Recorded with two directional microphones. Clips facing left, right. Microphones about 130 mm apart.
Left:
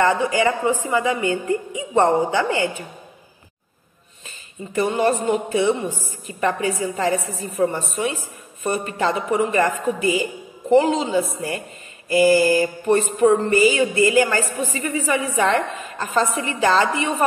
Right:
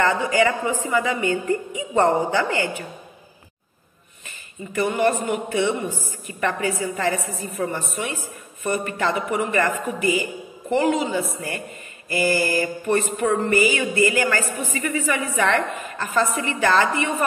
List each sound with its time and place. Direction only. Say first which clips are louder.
0.0 s a woman's voice: left 1 dB; 15° left (ahead or behind)
4.7 s mantra: left 1 dB; 20° left (ahead or behind)